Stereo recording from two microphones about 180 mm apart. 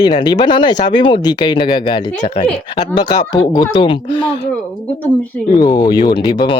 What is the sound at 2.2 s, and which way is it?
Speech, 40° left (ahead or behind).